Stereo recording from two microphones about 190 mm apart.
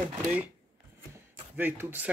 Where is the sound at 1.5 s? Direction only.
10° right (ahead or behind).